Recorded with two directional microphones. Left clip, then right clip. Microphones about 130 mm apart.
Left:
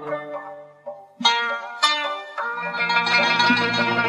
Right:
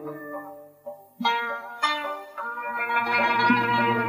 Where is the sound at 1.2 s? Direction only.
35° right (ahead or behind).